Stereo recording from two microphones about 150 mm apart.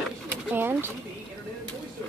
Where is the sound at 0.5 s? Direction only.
15° right (ahead or behind).